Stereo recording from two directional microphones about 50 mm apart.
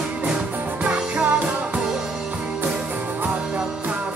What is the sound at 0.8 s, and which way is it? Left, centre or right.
Music, centre.